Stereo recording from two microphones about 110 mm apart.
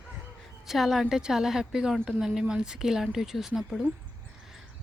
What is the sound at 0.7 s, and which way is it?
Speech, centre (ahead or behind).